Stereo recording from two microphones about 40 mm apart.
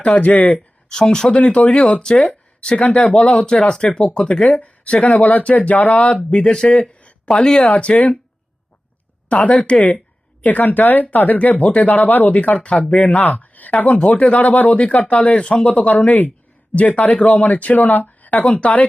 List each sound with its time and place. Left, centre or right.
0.3 s speech: left
0.9 s speech: centre
1.4 s speech: left
4.4 s speech: left
6.3 s speech: left
9.3 s speech: left
11.5 s speech: left
11.9 s speech: left
12.9 s speech: left
13.1 s speech: left
15.9 s speech: left
16.7 s speech: left